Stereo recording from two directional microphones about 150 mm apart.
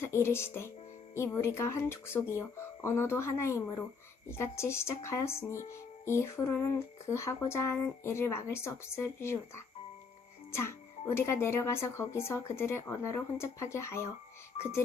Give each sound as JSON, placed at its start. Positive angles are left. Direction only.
{"t": 0.0, "sound": "speech", "side_deg": 15}
{"t": 14.5, "sound": "speech", "side_deg": 45}